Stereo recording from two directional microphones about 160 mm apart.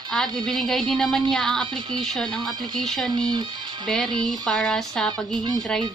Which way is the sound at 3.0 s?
30° right (ahead or behind).